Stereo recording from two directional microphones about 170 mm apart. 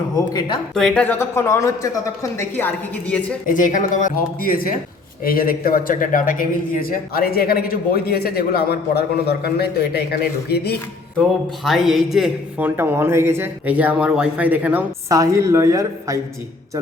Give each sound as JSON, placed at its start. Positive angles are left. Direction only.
{"t": 0.3, "sound": "speech", "side_deg": 25}
{"t": 0.7, "sound": "speech", "side_deg": 0}
{"t": 3.5, "sound": "speech", "side_deg": 50}
{"t": 11.6, "sound": "speech", "side_deg": 0}